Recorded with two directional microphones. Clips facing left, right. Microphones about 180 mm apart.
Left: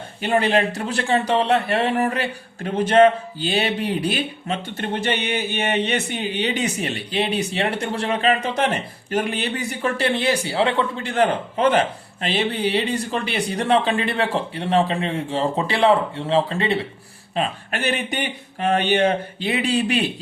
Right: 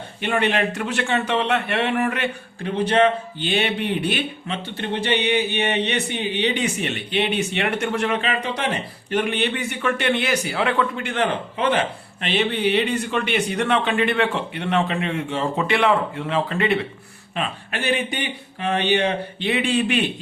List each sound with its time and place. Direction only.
0.2 s speech: 35° left (ahead or behind)